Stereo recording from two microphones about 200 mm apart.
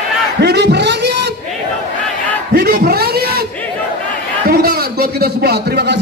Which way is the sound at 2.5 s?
50° right (ahead or behind).